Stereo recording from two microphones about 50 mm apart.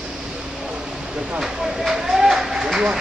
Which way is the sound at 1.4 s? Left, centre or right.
Centre.